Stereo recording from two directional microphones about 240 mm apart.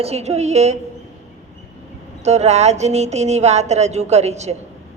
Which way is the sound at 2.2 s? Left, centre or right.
Right.